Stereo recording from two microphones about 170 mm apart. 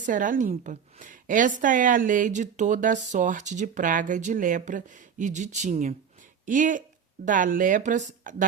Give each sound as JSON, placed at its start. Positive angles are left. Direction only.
{"t": 0.0, "sound": "a woman's voice", "side_deg": -50}